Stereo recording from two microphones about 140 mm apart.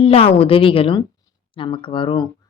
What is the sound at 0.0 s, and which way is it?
A woman's voice, 40° left (ahead or behind).